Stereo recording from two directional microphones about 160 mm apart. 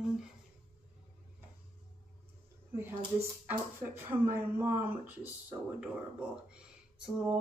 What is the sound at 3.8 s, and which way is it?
Speech, 15° right (ahead or behind).